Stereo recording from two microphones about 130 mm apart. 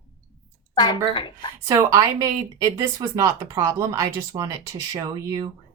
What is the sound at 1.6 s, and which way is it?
Speech, 25° right (ahead or behind).